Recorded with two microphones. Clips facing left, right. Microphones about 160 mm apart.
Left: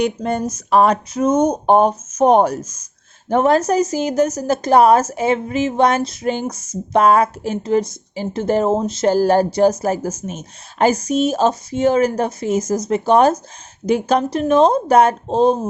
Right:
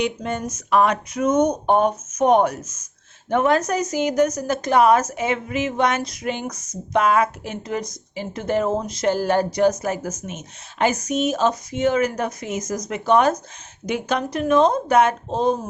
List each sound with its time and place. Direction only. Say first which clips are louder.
0.0 s a woman's voice: left 5 dB; 40° left (ahead or behind)